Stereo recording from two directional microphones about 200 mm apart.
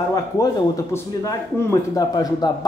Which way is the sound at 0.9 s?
15° left (ahead or behind).